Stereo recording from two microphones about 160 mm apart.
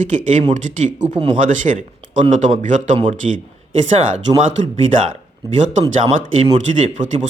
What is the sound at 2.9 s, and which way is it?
Speech, 30° right (ahead or behind).